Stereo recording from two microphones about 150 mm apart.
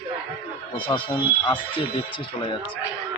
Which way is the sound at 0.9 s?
30° left (ahead or behind).